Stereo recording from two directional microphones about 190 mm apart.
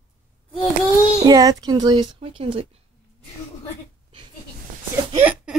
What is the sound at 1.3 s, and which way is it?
A woman's voice, 20° right (ahead or behind).